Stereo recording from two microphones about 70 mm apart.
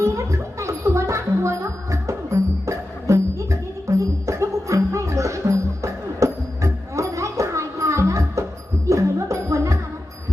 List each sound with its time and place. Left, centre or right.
0.0 s music: right